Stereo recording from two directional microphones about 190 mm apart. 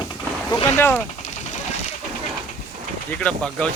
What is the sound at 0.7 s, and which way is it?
Speech, 10° left (ahead or behind).